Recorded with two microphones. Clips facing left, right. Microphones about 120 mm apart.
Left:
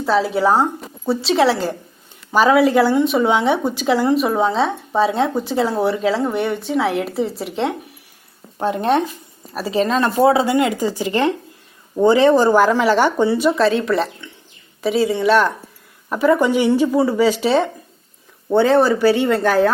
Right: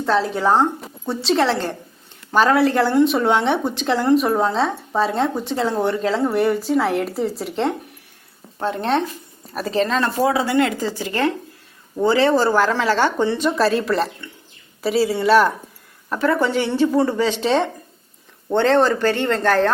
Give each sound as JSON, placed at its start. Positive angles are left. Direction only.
{"t": 0.0, "sound": "a woman's voice", "side_deg": 5}
{"t": 8.5, "sound": "speech", "side_deg": 15}
{"t": 9.5, "sound": "speech", "side_deg": 5}
{"t": 10.2, "sound": "speech", "side_deg": 25}
{"t": 10.4, "sound": "speech", "side_deg": 15}
{"t": 13.6, "sound": "a woman's voice", "side_deg": 0}
{"t": 16.0, "sound": "speech", "side_deg": 10}